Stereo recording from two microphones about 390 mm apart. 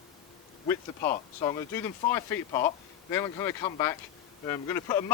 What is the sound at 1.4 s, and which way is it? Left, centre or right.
Speech, centre.